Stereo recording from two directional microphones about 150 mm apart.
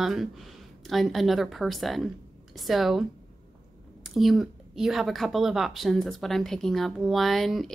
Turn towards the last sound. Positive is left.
turn(degrees=0)  # may be behind; listen again after turning